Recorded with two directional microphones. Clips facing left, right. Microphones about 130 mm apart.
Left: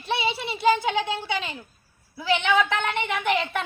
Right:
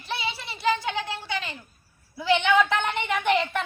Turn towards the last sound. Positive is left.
turn(degrees=5)  # may be behind; listen again after turning